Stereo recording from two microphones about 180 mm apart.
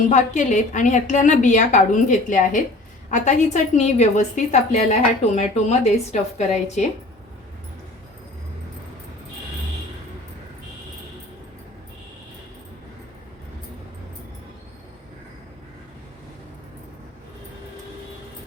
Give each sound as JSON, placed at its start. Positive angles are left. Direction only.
{"t": 0.1, "sound": "a woman's voice", "side_deg": 45}